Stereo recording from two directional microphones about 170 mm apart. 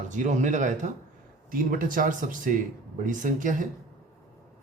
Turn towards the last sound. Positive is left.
turn(degrees=-50)  # may be behind; listen again after turning